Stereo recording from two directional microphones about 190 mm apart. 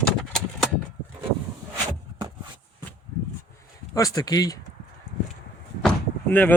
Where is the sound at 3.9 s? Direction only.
15° left (ahead or behind).